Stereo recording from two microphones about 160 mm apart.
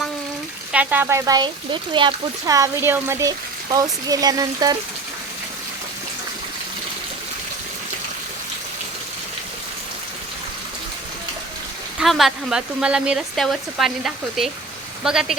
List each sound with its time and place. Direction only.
0.7 s speech: 10° right (ahead or behind)
11.9 s speech: centre (ahead or behind)